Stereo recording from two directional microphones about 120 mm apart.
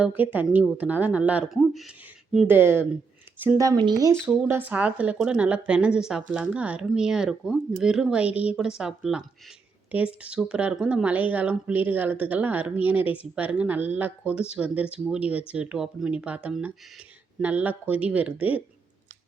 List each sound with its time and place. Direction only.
0.0 s a woman's voice: 15° right (ahead or behind)
1.5 s speech: centre (ahead or behind)
2.5 s a woman's voice: 20° right (ahead or behind)
3.8 s speech: 40° right (ahead or behind)
4.4 s a woman's voice: 15° right (ahead or behind)